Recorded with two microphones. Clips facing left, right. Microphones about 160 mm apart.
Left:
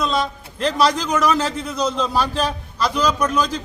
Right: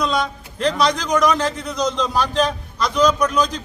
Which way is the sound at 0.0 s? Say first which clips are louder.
Even; centre (ahead or behind).